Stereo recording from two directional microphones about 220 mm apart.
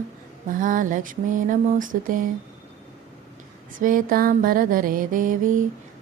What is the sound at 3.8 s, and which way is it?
Music, 40° right (ahead or behind).